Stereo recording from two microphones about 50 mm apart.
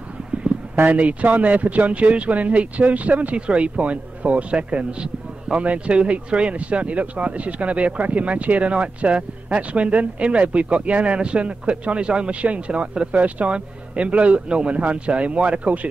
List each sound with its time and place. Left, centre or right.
0.8 s speech: right